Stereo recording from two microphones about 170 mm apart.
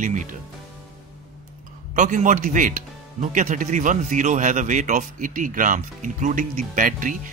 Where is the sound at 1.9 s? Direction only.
50° right (ahead or behind).